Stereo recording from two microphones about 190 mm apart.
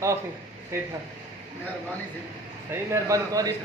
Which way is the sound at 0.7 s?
15° right (ahead or behind).